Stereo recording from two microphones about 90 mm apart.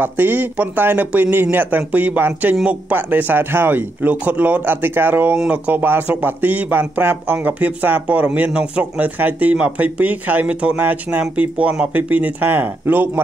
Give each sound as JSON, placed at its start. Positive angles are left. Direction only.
{"t": 0.0, "sound": "speech", "side_deg": -20}